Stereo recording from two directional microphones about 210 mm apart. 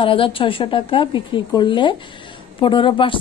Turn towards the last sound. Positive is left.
turn(degrees=25)  # may be behind; listen again after turning